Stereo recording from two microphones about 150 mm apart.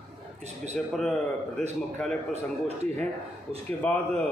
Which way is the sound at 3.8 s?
10° left (ahead or behind).